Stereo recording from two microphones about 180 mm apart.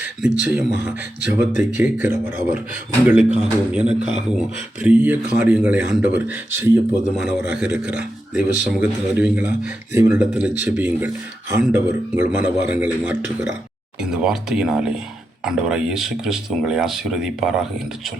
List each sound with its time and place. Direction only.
0.0 s a man's voice: 10° right (ahead or behind)